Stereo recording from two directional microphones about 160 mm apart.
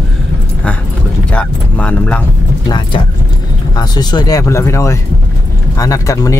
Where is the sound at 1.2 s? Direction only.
10° left (ahead or behind).